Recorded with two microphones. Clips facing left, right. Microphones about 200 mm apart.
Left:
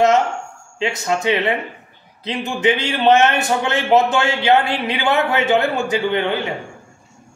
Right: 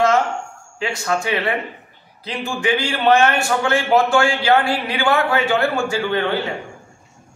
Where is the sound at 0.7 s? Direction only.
20° left (ahead or behind).